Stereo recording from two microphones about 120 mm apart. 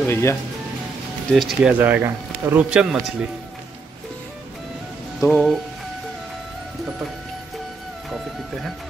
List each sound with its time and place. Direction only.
0.0 s speech: 20° left (ahead or behind)
1.3 s speech: centre (ahead or behind); by 2.6 s 20° right (ahead or behind)
2.7 s speech: 5° right (ahead or behind)
5.2 s speech: centre (ahead or behind)